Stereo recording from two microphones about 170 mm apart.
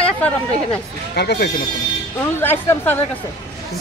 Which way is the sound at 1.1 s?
75° left (ahead or behind).